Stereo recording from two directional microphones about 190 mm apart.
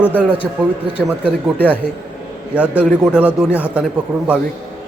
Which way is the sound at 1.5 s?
10° left (ahead or behind).